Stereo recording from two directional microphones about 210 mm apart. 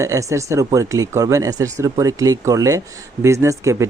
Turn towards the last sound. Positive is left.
turn(degrees=-15)  # may be behind; listen again after turning